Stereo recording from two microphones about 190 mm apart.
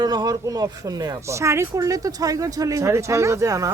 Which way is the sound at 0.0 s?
20° right (ahead or behind).